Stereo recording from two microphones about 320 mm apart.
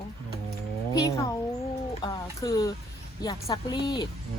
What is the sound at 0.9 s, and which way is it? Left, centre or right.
A child's voice, centre.